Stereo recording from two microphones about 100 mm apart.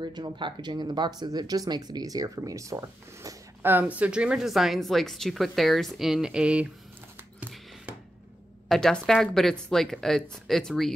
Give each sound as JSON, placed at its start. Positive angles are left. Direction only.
{"t": 0.0, "sound": "speech", "side_deg": -50}
{"t": 3.6, "sound": "speech", "side_deg": -20}
{"t": 8.6, "sound": "speech", "side_deg": 5}